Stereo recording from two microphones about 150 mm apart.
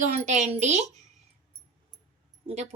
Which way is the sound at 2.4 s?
50° right (ahead or behind).